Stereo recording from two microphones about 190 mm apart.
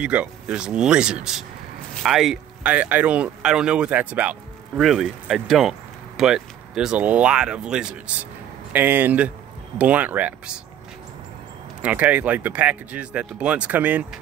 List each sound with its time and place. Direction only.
0.0 s speech: 5° right (ahead or behind)
11.8 s speech: 5° right (ahead or behind)